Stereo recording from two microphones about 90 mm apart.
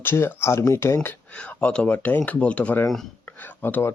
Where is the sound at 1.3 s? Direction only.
15° left (ahead or behind).